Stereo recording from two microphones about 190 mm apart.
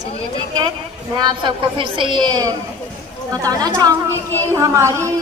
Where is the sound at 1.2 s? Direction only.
25° right (ahead or behind).